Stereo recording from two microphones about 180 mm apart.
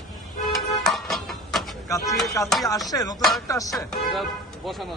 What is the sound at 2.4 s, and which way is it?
Chopping, 15° left (ahead or behind).